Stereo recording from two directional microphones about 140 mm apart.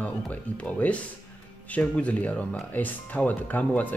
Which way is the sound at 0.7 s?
10° left (ahead or behind).